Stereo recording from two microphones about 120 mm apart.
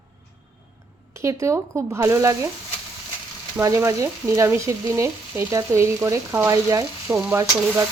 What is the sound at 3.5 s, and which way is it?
Frying, 25° right (ahead or behind).